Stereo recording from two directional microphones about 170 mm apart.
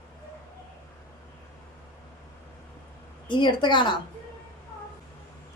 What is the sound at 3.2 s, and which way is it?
Speech, 25° left (ahead or behind).